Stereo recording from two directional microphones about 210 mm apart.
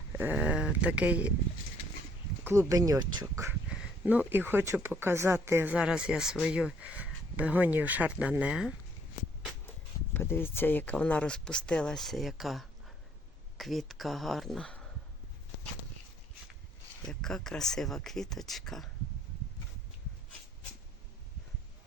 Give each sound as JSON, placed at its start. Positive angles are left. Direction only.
{"t": 0.1, "sound": "speech", "side_deg": -10}
{"t": 2.4, "sound": "speech", "side_deg": -10}
{"t": 10.2, "sound": "speech", "side_deg": 10}
{"t": 17.1, "sound": "speech", "side_deg": 5}